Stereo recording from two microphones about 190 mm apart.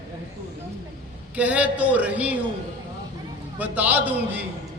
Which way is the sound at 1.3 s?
5° right (ahead or behind).